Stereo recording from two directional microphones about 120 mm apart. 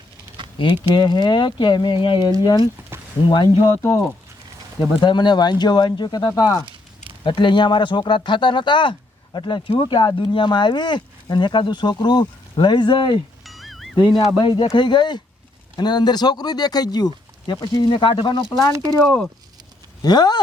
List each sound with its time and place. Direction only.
0.6 s speech: 40° left (ahead or behind)
2.9 s a sound: 20° right (ahead or behind)
3.2 s speech: 40° left (ahead or behind)
3.7 s speech: 25° left (ahead or behind)
4.9 s speech: 40° left (ahead or behind)
13.4 s music: centre (ahead or behind)
14.3 s speech: 40° left (ahead or behind)
18.7 s speech: 30° right (ahead or behind)
19.0 s speech: 5° left (ahead or behind)
20.0 s speech: 35° left (ahead or behind)